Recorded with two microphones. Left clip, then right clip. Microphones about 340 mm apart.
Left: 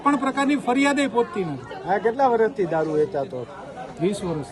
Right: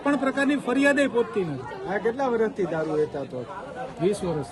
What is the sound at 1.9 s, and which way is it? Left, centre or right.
Speech, left.